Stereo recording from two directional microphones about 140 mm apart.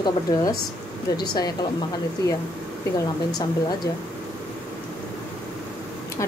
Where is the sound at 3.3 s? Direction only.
30° left (ahead or behind).